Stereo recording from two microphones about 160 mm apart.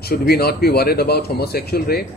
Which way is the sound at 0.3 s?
80° left.